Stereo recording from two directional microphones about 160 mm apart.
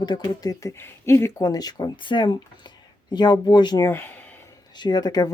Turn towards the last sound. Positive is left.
turn(degrees=25)  # may be behind; listen again after turning